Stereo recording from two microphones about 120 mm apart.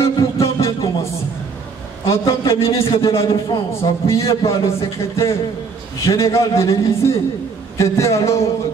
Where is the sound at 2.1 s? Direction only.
25° left (ahead or behind).